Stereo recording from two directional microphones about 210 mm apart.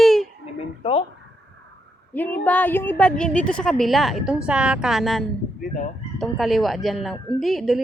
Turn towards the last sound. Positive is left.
turn(degrees=0)  # may be behind; listen again after turning